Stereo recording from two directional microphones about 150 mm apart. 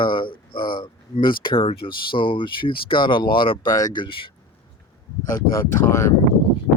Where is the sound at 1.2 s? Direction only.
30° left (ahead or behind).